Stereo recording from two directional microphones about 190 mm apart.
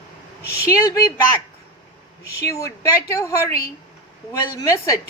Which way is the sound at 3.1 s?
15° left (ahead or behind).